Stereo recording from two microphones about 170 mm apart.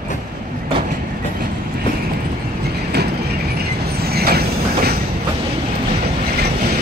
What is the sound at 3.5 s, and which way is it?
Train, 70° right (ahead or behind).